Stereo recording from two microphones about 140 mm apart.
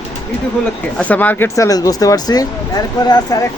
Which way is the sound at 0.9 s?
10° left (ahead or behind).